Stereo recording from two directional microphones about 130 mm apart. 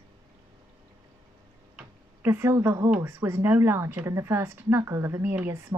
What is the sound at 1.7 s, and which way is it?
Tick-tock, 15° right (ahead or behind).